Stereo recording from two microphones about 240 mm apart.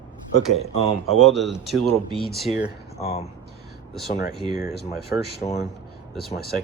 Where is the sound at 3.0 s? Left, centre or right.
Left.